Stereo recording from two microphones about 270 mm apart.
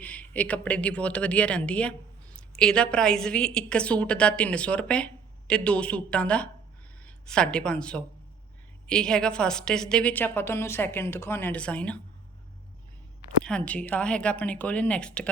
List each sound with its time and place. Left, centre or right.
0.0 s speech: centre
13.4 s speech: centre